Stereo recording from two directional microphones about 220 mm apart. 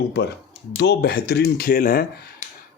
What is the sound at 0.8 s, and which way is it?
Speech, 50° left (ahead or behind).